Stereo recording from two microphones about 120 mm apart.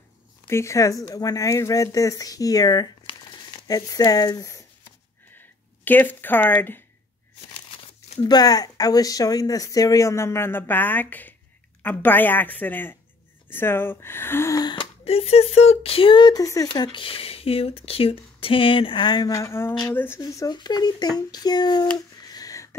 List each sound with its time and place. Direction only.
0.5 s speech: 25° left (ahead or behind)
5.9 s a woman's voice: 15° left (ahead or behind)
8.2 s a woman's voice: 35° left (ahead or behind)
14.6 s a sound: 40° left (ahead or behind)
15.0 s a woman's voice: 55° left (ahead or behind); by 20.2 s 15° left (ahead or behind)
20.2 s speech: 30° left (ahead or behind)
22.2 s a sound: 30° left (ahead or behind)